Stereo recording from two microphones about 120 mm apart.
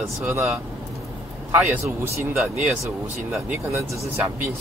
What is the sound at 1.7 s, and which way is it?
Speech, 20° right (ahead or behind).